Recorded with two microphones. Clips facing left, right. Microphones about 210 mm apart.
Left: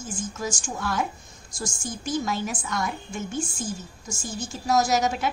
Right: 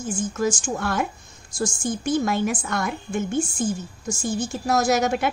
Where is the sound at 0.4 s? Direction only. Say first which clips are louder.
Right 8 dB; 60° right (ahead or behind).